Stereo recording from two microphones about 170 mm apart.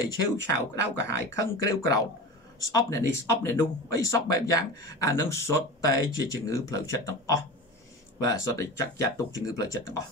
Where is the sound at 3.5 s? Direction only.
20° left (ahead or behind).